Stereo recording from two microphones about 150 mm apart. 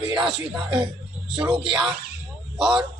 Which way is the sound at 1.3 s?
5° right (ahead or behind).